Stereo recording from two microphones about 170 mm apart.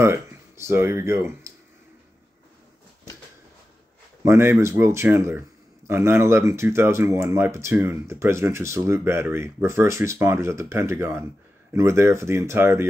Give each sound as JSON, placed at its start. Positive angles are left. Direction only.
{"t": 0.0, "sound": "speech", "side_deg": -15}
{"t": 4.2, "sound": "speech", "side_deg": -15}